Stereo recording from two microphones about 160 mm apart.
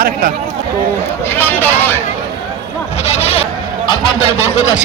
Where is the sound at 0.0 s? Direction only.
60° right (ahead or behind).